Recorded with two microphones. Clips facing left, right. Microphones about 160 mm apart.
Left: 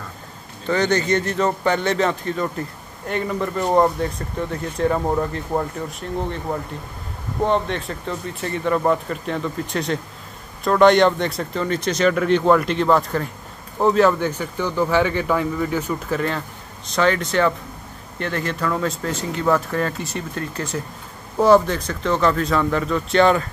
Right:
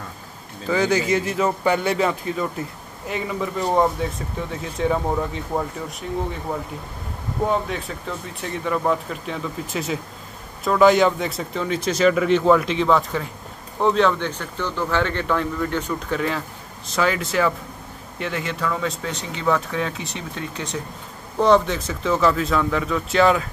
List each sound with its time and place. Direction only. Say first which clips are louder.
0.7 s speech: left 1 dB; 5° right (ahead or behind)